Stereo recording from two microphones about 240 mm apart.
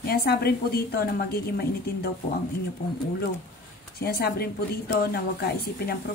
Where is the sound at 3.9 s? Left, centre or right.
Left.